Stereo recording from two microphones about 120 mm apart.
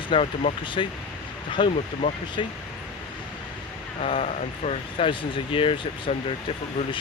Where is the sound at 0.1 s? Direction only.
50° left (ahead or behind).